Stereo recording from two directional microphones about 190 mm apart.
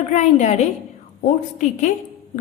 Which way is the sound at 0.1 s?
40° left (ahead or behind).